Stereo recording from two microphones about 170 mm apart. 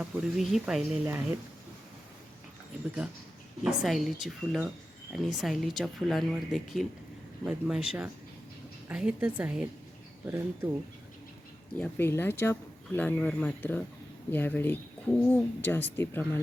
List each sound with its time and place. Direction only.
0.0 s a woman's voice: 5° right (ahead or behind)
3.6 s a woman's voice: centre (ahead or behind)
11.8 s speech: 15° left (ahead or behind)